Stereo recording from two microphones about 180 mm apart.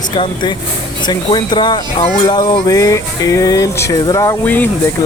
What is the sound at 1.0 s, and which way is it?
Speech, 25° left (ahead or behind).